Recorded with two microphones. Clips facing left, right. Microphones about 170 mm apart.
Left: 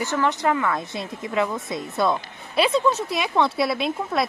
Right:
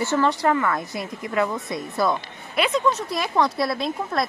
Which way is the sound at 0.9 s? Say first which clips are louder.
Even; 25° left (ahead or behind).